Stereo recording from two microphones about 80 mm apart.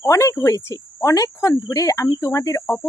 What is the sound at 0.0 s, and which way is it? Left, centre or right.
Speech, left.